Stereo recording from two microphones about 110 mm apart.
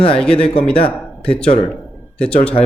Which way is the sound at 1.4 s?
60° left (ahead or behind).